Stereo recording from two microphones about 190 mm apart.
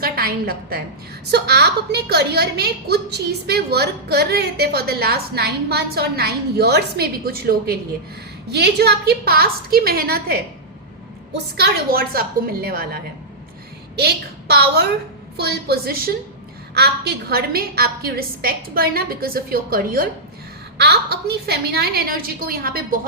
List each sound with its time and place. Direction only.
0.0 s a woman's voice: 50° right (ahead or behind)
11.5 s a woman's voice: 55° right (ahead or behind)